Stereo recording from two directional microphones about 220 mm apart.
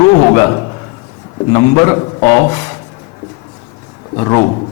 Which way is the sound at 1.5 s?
15° left (ahead or behind).